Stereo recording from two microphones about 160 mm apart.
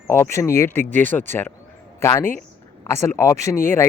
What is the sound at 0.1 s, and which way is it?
Speech, 15° left (ahead or behind).